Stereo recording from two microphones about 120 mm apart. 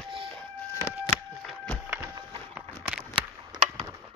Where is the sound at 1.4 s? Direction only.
5° left (ahead or behind).